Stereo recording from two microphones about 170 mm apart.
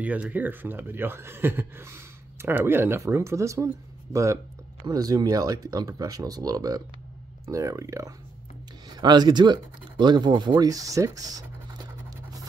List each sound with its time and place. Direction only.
0.0 s speech: 10° right (ahead or behind)